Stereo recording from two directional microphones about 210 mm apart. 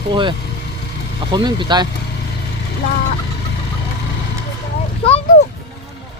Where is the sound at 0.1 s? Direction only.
20° right (ahead or behind).